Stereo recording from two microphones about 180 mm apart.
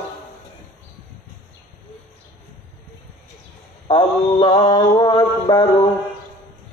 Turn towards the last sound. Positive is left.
turn(degrees=20)  # may be behind; listen again after turning